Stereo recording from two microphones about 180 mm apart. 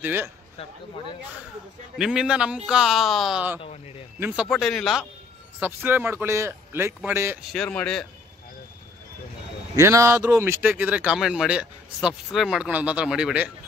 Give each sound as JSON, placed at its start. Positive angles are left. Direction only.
{"t": 0.0, "sound": "speech", "side_deg": -10}
{"t": 2.0, "sound": "a man's voice", "side_deg": -5}
{"t": 3.6, "sound": "speech", "side_deg": 35}
{"t": 4.2, "sound": "a man's voice", "side_deg": -5}
{"t": 5.6, "sound": "speech", "side_deg": -10}
{"t": 7.5, "sound": "a man's voice", "side_deg": 5}
{"t": 9.8, "sound": "a man's voice", "side_deg": -15}